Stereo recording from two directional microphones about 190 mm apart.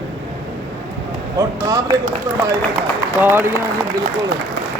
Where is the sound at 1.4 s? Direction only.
20° right (ahead or behind).